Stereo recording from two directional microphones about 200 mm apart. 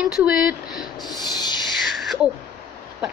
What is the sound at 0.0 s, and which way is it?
Speech, 5° right (ahead or behind).